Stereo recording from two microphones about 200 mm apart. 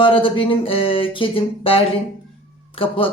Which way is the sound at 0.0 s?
25° left (ahead or behind).